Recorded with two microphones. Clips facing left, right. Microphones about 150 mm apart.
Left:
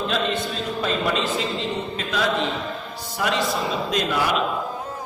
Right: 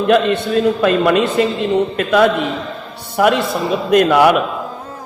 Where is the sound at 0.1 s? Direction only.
60° right (ahead or behind).